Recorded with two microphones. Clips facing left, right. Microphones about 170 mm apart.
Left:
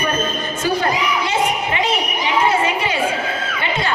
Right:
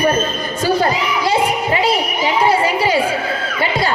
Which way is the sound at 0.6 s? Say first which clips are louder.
Right 3 dB; 35° right (ahead or behind).